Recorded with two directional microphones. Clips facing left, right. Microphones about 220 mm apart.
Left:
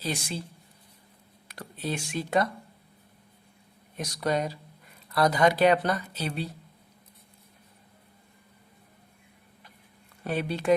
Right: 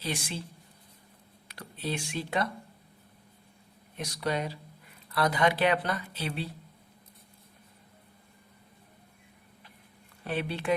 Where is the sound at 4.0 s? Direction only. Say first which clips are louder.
Left 3 dB; 45° left (ahead or behind).